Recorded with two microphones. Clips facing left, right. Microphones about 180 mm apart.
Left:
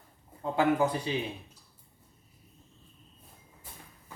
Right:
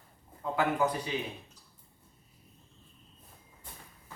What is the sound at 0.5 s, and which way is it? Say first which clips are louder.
Speech: left 3 dB; 25° left (ahead or behind).